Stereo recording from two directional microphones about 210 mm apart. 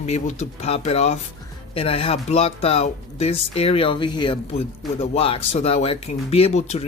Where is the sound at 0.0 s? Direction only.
35° left (ahead or behind).